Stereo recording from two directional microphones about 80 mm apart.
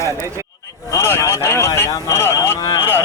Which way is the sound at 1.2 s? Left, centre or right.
Left.